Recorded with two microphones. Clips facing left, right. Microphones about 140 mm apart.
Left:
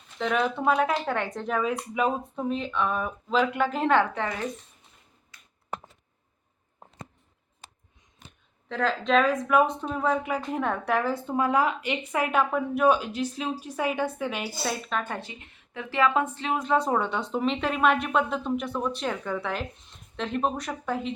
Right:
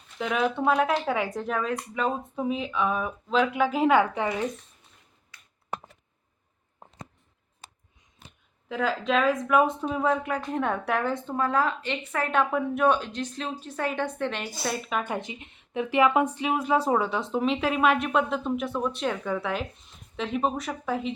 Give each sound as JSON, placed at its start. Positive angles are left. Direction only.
{"t": 0.2, "sound": "speech", "side_deg": 0}
{"t": 2.3, "sound": "speech", "side_deg": -5}
{"t": 8.7, "sound": "speech", "side_deg": -5}
{"t": 14.9, "sound": "speech", "side_deg": -15}